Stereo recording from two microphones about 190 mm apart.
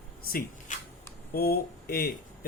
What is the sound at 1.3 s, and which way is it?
Speech, 55° left (ahead or behind).